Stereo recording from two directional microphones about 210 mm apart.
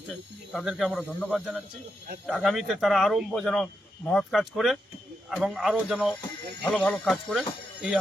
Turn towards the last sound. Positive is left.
turn(degrees=-5)  # may be behind; listen again after turning